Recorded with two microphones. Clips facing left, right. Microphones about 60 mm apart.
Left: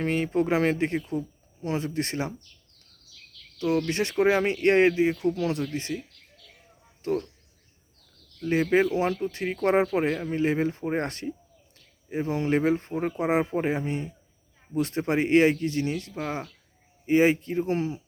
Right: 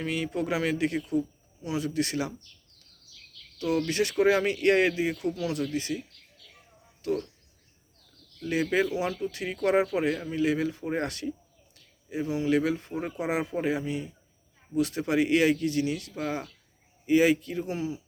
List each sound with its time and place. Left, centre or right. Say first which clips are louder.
0.0 s speech: left 5 dB; left
3.6 s speech: left 1 dB; left
7.0 s speech: left 2 dB; left
8.4 s speech: left 4 dB; left
17.7 s speech: left 3 dB; left